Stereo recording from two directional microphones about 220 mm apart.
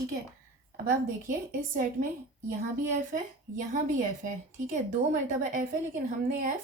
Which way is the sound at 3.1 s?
35° right (ahead or behind).